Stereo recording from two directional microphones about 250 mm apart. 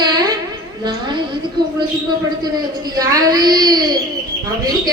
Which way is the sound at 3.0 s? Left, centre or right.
Centre.